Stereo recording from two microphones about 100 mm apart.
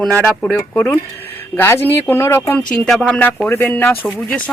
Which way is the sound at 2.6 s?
5° left (ahead or behind).